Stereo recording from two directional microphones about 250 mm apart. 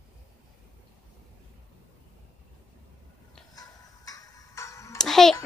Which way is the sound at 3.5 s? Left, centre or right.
Centre.